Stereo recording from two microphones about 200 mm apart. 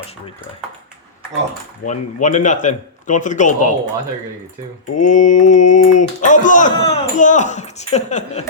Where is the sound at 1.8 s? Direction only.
40° left (ahead or behind).